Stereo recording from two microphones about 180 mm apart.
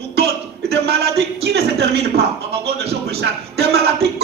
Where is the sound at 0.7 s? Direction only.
65° right (ahead or behind).